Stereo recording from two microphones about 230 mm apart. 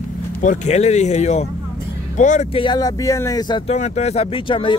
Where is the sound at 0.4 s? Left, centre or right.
Left.